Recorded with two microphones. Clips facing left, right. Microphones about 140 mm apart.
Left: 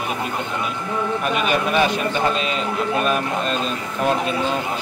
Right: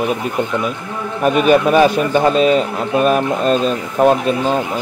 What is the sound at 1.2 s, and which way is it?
Speech, 45° right (ahead or behind).